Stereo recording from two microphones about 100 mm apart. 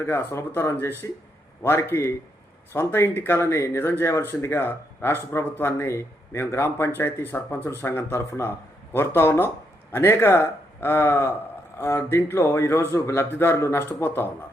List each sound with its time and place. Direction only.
0.0 s speech: 25° left (ahead or behind)